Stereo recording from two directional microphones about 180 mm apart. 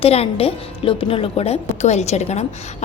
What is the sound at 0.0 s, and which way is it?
A woman's voice, 35° left (ahead or behind).